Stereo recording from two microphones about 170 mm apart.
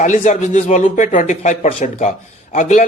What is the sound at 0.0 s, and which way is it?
Speech, 45° left (ahead or behind).